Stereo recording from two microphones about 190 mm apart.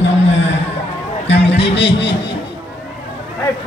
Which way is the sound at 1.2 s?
65° left (ahead or behind).